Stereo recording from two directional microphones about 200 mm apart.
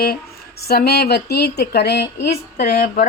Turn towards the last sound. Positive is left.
turn(degrees=45)  # may be behind; listen again after turning